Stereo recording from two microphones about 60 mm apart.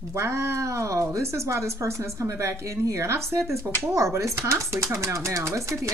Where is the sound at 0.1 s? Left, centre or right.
Right.